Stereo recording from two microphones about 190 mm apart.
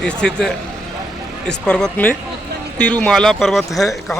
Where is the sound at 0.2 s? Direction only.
5° left (ahead or behind).